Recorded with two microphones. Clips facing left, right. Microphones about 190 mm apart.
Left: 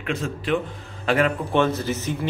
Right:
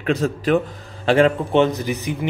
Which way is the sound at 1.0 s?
30° right (ahead or behind).